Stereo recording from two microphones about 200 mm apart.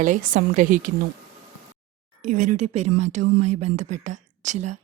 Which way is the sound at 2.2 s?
40° right (ahead or behind).